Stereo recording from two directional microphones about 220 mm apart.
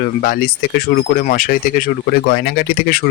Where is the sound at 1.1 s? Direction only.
40° left (ahead or behind).